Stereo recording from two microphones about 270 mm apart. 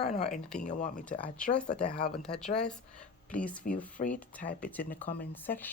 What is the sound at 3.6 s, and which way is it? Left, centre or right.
Speech, left.